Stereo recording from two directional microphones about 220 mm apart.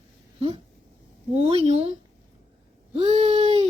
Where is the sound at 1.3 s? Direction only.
30° right (ahead or behind).